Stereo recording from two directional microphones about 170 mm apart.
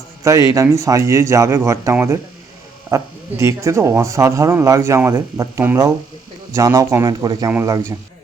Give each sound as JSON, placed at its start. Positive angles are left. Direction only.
{"t": 0.3, "sound": "speech", "side_deg": -20}